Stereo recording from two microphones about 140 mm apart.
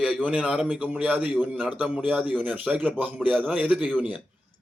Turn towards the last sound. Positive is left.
turn(degrees=-10)  # may be behind; listen again after turning